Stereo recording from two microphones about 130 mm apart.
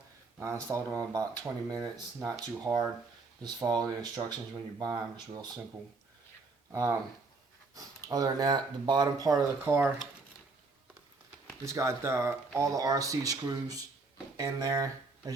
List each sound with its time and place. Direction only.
0.3 s speech: 20° right (ahead or behind)
6.7 s speech: 25° right (ahead or behind)
11.6 s speech: 20° right (ahead or behind)